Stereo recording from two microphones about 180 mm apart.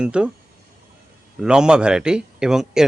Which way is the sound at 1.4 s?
5° right (ahead or behind).